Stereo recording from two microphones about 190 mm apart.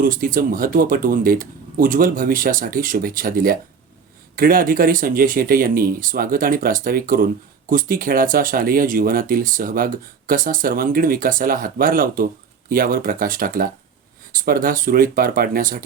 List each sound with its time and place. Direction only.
0.0 s speech: 45° right (ahead or behind)